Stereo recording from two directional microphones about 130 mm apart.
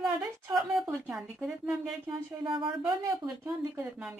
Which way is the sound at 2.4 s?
40° right (ahead or behind).